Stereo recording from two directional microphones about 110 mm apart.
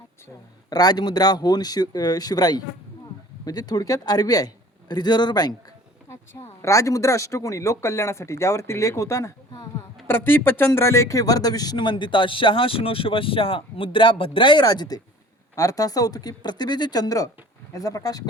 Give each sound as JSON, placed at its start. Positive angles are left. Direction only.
{"t": 0.7, "sound": "a man's voice", "side_deg": 35}
{"t": 6.6, "sound": "a man's voice", "side_deg": 30}